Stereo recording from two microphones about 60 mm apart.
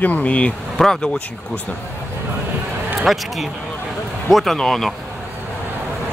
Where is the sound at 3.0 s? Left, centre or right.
Centre.